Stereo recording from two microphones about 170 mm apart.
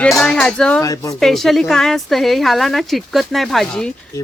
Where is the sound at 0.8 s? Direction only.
20° left (ahead or behind).